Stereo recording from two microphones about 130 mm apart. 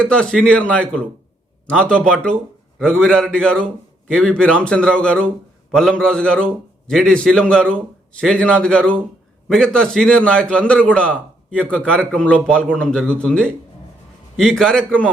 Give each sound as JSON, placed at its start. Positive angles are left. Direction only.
{"t": 0.0, "sound": "a man's voice", "side_deg": 5}